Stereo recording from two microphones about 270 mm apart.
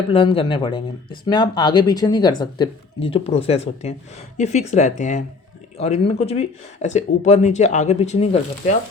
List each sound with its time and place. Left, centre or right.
0.1 s speech: centre